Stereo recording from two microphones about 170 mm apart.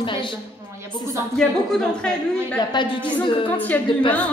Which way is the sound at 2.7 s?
25° left (ahead or behind).